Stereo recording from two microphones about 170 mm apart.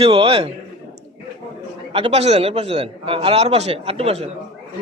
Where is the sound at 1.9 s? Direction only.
35° right (ahead or behind).